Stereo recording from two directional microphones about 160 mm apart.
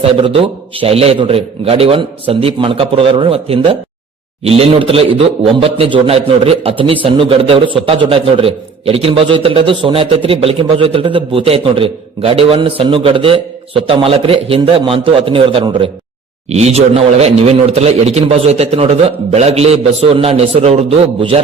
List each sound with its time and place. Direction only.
0.3 s a man's voice: 35° right (ahead or behind)